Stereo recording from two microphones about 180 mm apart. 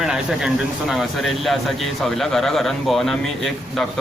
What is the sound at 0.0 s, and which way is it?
Speech, 5° right (ahead or behind).